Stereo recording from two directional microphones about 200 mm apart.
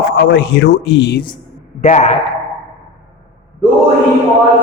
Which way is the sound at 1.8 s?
35° left (ahead or behind).